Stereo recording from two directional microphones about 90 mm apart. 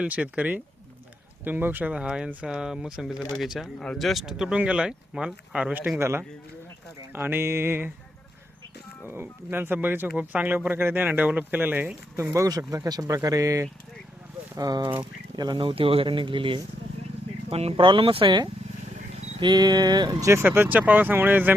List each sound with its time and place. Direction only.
0.0 s speech: 15° right (ahead or behind)
6.0 s speech: 30° right (ahead or behind)
9.2 s speech: 25° right (ahead or behind)
12.1 s speech: 35° right (ahead or behind)
15.5 s speech: 85° right
17.5 s speech: 80° right; by 20.3 s 40° right (ahead or behind)
20.3 s speech: 25° right (ahead or behind)